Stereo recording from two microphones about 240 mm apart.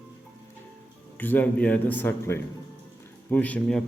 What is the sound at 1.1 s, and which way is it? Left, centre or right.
A man's voice, centre.